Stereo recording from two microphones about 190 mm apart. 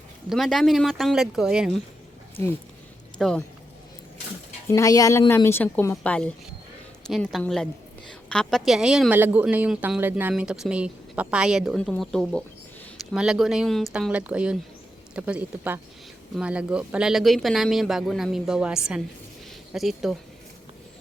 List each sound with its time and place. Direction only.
0.3 s a woman's voice: centre (ahead or behind)
3.2 s speech: centre (ahead or behind)
4.7 s a woman's voice: 15° left (ahead or behind); by 20.1 s centre (ahead or behind)